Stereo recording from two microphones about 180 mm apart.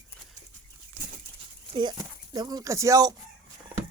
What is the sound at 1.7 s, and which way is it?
Speech, 25° right (ahead or behind).